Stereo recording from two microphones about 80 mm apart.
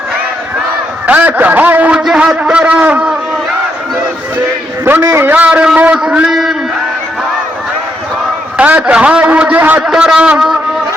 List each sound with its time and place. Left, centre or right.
1.0 s a man's voice: right
5.2 s a man's voice: right
6.3 s a sound: centre
8.5 s a man's voice: centre
9.8 s a man's voice: centre